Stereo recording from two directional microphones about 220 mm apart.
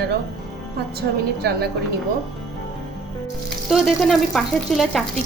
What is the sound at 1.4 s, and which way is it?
Speech, 45° right (ahead or behind).